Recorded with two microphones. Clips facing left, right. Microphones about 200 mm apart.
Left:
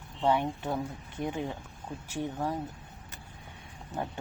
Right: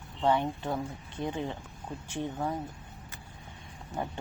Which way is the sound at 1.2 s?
20° right (ahead or behind).